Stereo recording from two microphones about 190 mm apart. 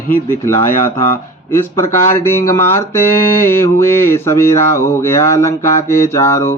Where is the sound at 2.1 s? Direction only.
10° left (ahead or behind).